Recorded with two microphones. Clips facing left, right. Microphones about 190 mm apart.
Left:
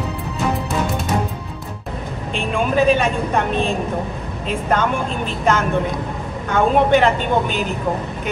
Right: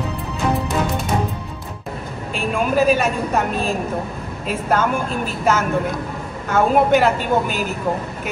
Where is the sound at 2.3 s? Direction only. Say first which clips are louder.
Even; 5° right (ahead or behind).